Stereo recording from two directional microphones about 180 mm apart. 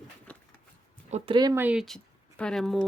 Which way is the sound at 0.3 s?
10° left (ahead or behind).